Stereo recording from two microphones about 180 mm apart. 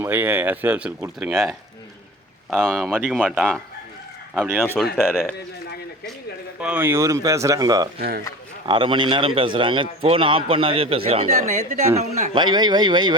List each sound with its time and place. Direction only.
0.0 s speech: 10° right (ahead or behind)
4.8 s speech: centre (ahead or behind)
6.6 s speech: 10° right (ahead or behind)
7.9 s speech: 60° right (ahead or behind)
8.6 s a man's voice: 25° right (ahead or behind)
12.3 s a man's voice: 25° right (ahead or behind)